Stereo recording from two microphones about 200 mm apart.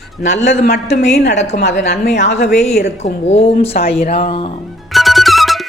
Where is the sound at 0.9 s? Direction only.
35° left (ahead or behind).